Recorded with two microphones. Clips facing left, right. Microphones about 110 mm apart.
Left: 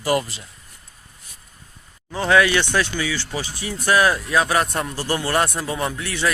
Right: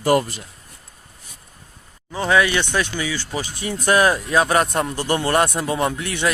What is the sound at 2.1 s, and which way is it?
Speech, 15° right (ahead or behind).